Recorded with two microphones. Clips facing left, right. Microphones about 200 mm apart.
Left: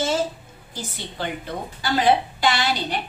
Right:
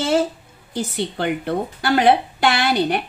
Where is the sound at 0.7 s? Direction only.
65° right (ahead or behind).